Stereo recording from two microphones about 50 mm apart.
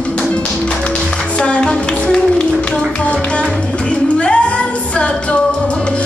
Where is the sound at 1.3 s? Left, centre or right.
Centre.